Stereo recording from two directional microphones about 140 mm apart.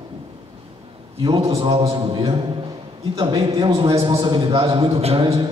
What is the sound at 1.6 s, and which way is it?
A man's voice, 40° right (ahead or behind).